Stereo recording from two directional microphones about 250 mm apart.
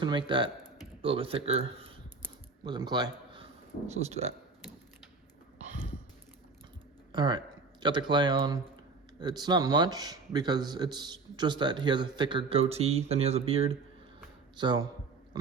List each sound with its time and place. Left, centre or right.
0.0 s speech: centre
2.2 s a sound: centre
3.8 s speech: right
7.1 s speech: centre